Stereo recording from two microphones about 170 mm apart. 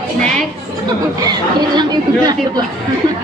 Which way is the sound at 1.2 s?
25° right (ahead or behind).